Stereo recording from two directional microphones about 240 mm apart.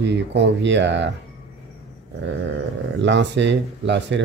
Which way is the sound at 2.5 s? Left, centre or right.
Right.